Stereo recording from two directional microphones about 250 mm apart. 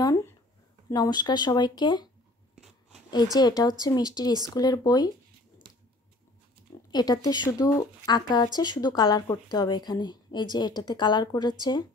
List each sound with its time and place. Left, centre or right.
0.0 s a sound: centre
0.8 s a woman's voice: centre
3.3 s a woman's voice: centre
6.9 s a woman's voice: centre